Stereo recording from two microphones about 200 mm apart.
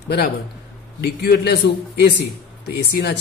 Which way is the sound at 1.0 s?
55° left (ahead or behind).